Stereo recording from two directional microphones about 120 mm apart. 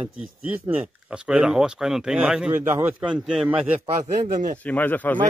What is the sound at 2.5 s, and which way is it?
Speech, 15° right (ahead or behind).